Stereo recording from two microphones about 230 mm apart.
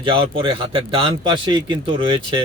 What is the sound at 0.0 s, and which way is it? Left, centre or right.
Mantra, right.